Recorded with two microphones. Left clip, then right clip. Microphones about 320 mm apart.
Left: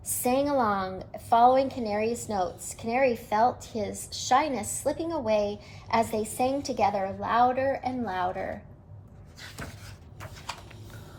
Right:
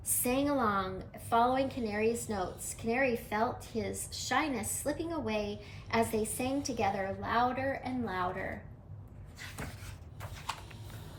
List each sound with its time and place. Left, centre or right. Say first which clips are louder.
0.1 s a woman's voice: left 6 dB; centre